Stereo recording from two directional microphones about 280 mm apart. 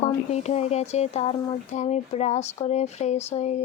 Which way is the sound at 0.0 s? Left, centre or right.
Left.